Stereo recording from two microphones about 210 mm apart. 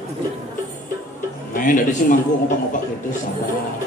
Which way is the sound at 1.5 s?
40° left (ahead or behind).